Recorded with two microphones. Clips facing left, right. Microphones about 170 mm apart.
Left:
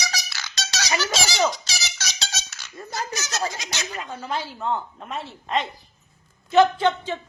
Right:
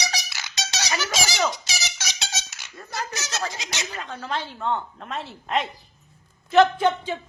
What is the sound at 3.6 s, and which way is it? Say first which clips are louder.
Speech: even; 20° right (ahead or behind).